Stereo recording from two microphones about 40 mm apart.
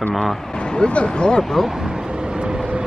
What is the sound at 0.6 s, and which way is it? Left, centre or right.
Speech, left.